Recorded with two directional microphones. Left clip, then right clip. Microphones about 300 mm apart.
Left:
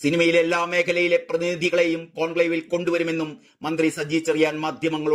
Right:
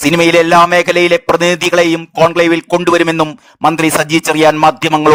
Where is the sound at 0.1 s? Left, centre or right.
Right.